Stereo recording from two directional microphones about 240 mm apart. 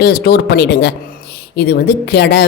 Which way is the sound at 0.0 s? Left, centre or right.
Left.